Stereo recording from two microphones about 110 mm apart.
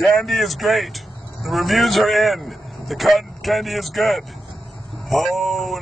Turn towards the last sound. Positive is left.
turn(degrees=0)  # may be behind; listen again after turning